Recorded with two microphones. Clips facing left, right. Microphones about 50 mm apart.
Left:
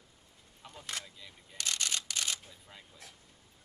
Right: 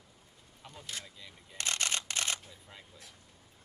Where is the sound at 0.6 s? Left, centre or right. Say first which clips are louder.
Even; centre.